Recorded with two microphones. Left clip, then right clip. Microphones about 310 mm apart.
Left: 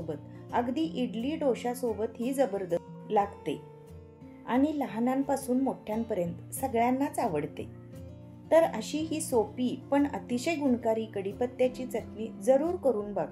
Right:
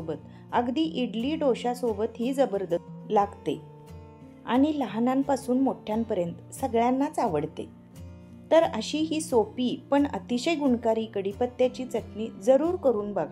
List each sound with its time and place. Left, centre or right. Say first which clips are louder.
0.1 s a woman's voice: right 4 dB; centre